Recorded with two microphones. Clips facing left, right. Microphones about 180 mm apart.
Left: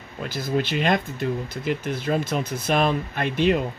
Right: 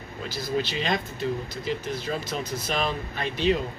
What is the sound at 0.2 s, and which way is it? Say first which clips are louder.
Speech: left 3 dB; 55° left (ahead or behind).